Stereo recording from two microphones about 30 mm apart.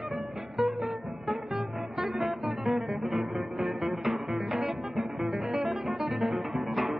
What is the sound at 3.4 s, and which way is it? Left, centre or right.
Music, centre.